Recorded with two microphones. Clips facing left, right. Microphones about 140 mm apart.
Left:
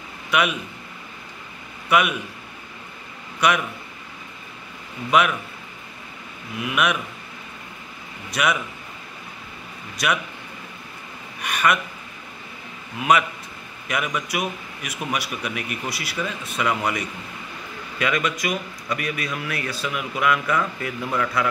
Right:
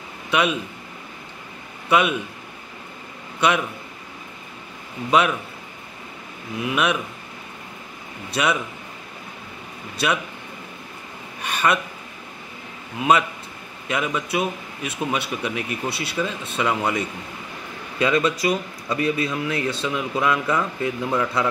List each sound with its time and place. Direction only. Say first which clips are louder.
0.3 s speech: right 1 dB; 25° right (ahead or behind)
1.9 s speech: right 1 dB; 25° right (ahead or behind)
3.3 s a man's voice: right 1 dB; 25° right (ahead or behind)
6.6 s speech: right 1 dB; 30° right (ahead or behind)
8.3 s speech: right 1 dB; 30° right (ahead or behind)
10.0 s speech: right 1 dB; 30° right (ahead or behind)
11.4 s a sound: even; 30° right (ahead or behind)
13.8 s speech: right 2 dB; 25° right (ahead or behind)